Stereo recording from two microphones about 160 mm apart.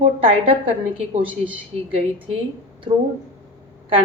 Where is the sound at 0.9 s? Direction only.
30° right (ahead or behind).